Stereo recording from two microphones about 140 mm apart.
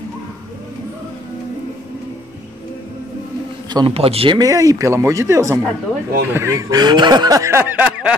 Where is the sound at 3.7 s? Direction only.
40° right (ahead or behind).